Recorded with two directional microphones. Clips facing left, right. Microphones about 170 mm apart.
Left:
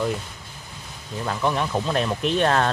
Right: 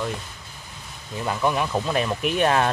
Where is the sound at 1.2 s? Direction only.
5° right (ahead or behind).